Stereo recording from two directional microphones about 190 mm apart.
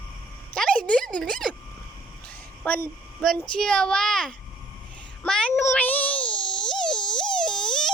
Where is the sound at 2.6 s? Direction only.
5° left (ahead or behind).